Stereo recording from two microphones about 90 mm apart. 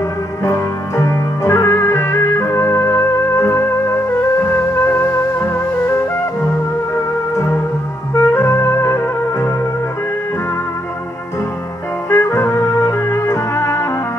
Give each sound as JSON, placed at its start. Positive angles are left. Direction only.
{"t": 0.4, "sound": "music", "side_deg": 35}
{"t": 7.3, "sound": "organ", "side_deg": 30}
{"t": 8.1, "sound": "music", "side_deg": 30}
{"t": 12.1, "sound": "music", "side_deg": 35}